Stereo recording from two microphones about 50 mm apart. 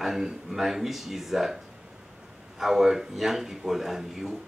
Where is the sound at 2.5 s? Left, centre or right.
Centre.